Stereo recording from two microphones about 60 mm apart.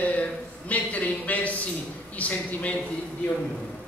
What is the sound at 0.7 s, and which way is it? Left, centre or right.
A man's voice, left.